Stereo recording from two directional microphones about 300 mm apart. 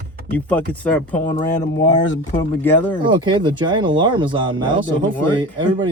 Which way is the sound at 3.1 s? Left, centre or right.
Centre.